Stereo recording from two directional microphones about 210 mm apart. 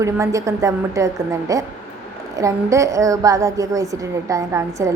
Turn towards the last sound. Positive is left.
turn(degrees=-15)  # may be behind; listen again after turning